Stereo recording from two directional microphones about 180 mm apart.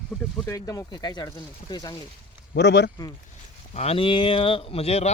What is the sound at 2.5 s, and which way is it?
Speech, 75° left (ahead or behind).